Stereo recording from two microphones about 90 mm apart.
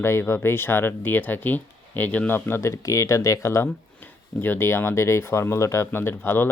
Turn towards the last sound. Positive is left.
turn(degrees=25)  # may be behind; listen again after turning